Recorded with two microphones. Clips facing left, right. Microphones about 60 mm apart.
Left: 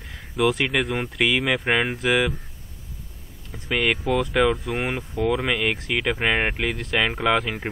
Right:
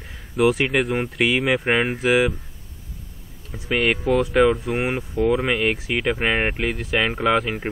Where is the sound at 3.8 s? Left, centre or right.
Centre.